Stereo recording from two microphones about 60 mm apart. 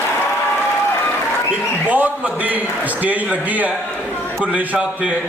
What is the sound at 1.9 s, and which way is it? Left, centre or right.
A man's voice, right.